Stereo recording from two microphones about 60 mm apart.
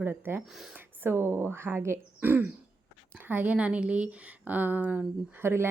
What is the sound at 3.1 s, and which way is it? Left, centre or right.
A woman's voice, right.